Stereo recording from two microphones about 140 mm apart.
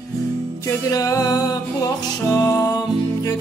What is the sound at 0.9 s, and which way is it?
Music, 25° left (ahead or behind).